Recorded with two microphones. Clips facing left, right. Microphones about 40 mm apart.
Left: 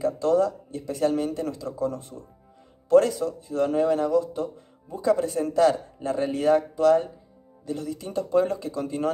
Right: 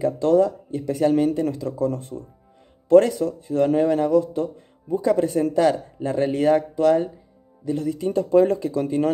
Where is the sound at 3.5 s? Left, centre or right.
Right.